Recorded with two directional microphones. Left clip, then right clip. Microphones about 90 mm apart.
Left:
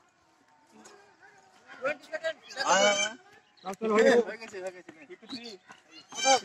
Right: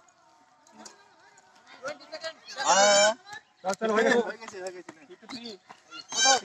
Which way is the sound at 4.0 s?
45° left (ahead or behind).